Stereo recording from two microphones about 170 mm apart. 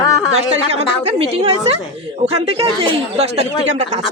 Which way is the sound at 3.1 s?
40° right (ahead or behind).